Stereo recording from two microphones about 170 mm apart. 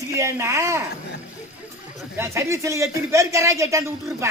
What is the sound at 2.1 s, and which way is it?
Speech, 15° right (ahead or behind).